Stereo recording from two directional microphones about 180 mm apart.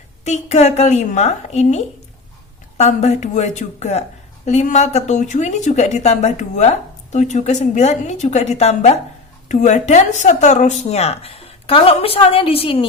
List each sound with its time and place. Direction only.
0.3 s a woman's voice: 40° left (ahead or behind)